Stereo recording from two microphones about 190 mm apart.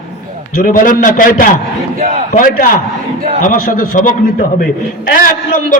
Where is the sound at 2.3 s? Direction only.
45° left (ahead or behind).